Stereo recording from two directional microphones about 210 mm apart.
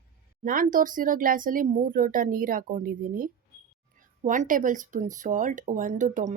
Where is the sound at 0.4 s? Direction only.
40° right (ahead or behind).